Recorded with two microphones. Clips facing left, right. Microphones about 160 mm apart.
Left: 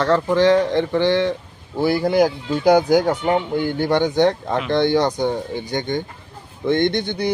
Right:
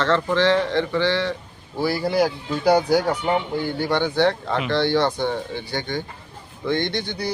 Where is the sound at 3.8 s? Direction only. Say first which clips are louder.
Left 4 dB; 50° left (ahead or behind).